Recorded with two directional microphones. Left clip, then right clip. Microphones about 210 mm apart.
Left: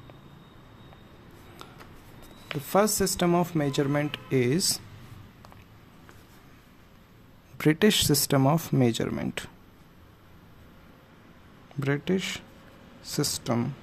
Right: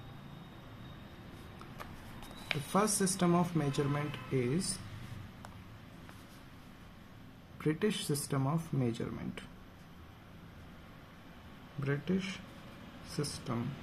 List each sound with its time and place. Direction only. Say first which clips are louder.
2.7 s speech: left 9 dB; 35° left (ahead or behind)
7.5 s speech: left 12 dB; 50° left (ahead or behind)
11.8 s speech: left 9 dB; 50° left (ahead or behind)